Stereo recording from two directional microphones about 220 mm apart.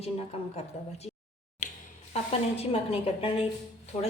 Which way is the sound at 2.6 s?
25° left (ahead or behind).